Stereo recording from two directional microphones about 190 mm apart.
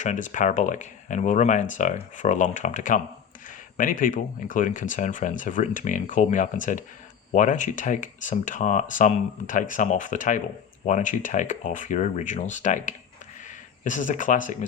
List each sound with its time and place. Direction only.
0.0 s speech: 40° left (ahead or behind)